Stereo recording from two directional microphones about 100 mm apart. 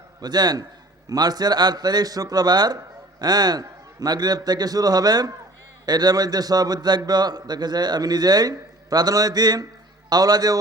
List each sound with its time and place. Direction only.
0.2 s a man's voice: 45° right (ahead or behind)